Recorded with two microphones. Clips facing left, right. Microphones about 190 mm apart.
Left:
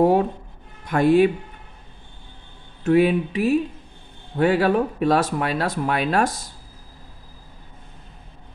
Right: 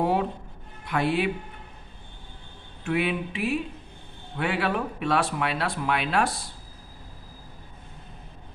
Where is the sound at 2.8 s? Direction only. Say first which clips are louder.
Left 9 dB; 40° left (ahead or behind).